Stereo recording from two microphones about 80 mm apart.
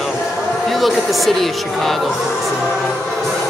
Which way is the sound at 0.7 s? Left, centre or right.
Centre.